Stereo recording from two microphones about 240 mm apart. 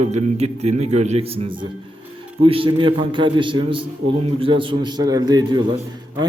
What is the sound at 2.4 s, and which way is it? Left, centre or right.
A man's voice, right.